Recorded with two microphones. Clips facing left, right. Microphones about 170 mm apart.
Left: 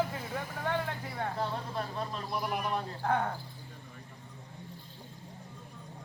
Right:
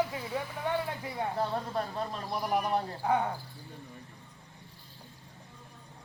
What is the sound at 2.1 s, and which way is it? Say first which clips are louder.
Speech: right 5 dB; 35° right (ahead or behind).